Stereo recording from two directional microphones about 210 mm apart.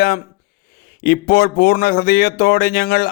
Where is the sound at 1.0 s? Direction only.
45° left (ahead or behind).